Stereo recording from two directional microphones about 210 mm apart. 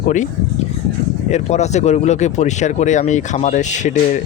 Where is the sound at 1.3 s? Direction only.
30° left (ahead or behind).